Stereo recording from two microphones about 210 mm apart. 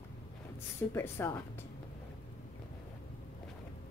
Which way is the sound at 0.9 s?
10° left (ahead or behind).